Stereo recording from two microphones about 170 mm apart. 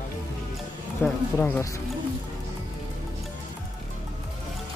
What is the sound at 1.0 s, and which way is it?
Speech, 10° left (ahead or behind).